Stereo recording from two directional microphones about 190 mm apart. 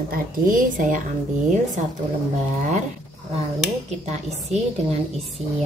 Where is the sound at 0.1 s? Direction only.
45° right (ahead or behind).